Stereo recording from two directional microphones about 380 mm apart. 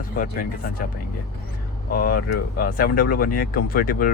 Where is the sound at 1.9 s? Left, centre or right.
Left.